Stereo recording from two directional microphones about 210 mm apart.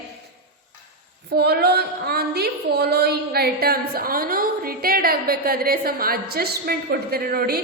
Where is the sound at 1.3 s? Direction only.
50° right (ahead or behind).